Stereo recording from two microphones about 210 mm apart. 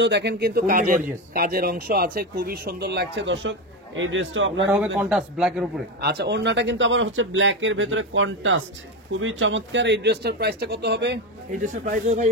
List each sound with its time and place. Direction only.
0.0 s a man's voice: 55° right (ahead or behind)
4.9 s a man's voice: centre (ahead or behind)
5.9 s speech: 50° right (ahead or behind)
11.6 s speech: 35° right (ahead or behind)